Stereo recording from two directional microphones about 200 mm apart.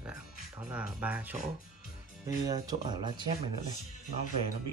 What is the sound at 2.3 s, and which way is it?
Speech, 20° right (ahead or behind).